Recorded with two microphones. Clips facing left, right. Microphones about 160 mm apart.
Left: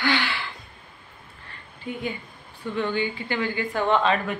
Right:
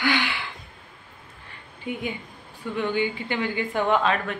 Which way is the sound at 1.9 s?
15° right (ahead or behind).